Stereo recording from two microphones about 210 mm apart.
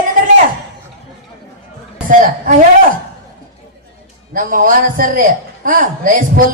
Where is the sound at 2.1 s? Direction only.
40° right (ahead or behind).